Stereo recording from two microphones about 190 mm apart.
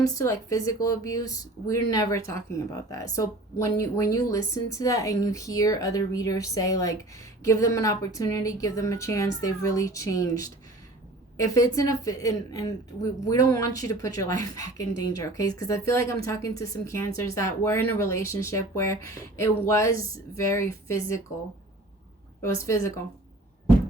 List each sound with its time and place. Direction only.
0.1 s speech: 15° left (ahead or behind)
22.6 s speech: 15° left (ahead or behind)